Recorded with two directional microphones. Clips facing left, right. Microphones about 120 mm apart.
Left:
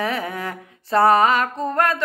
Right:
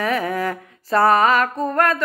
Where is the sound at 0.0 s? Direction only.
25° left (ahead or behind).